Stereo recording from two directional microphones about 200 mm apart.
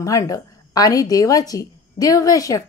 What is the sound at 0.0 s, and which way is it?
A woman's voice, 15° left (ahead or behind).